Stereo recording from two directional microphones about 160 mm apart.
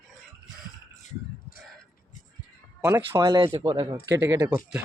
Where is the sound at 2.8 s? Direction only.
15° right (ahead or behind).